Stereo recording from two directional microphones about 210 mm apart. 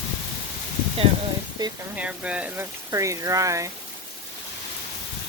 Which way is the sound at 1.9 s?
5° right (ahead or behind).